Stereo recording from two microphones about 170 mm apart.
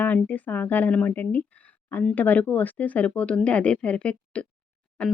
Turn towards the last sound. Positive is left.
turn(degrees=10)  # may be behind; listen again after turning